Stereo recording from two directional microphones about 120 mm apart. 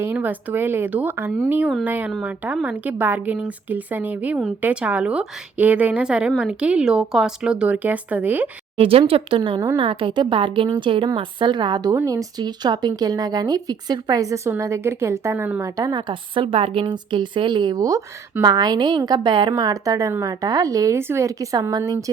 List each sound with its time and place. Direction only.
0.0 s a woman's voice: 15° right (ahead or behind)
8.8 s a woman's voice: 50° right (ahead or behind); by 15.6 s 15° right (ahead or behind)
15.6 s a woman's voice: 30° right (ahead or behind)